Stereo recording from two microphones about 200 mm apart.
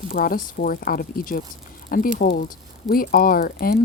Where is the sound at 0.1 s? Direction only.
45° left (ahead or behind).